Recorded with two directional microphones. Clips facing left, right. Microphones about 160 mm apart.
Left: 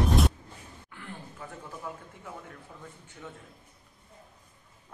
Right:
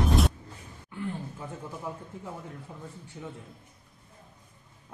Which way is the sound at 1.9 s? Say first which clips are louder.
Right 3 dB; 25° right (ahead or behind).